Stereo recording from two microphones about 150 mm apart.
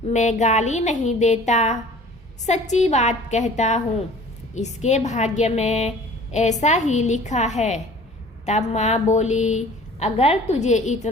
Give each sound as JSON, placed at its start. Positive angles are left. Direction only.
{"t": 0.1, "sound": "a woman's voice", "side_deg": 50}